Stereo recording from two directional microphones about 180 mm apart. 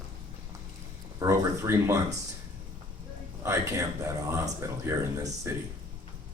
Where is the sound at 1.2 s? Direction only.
15° right (ahead or behind).